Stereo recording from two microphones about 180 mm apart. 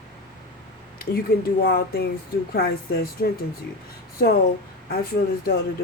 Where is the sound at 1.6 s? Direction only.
65° left (ahead or behind).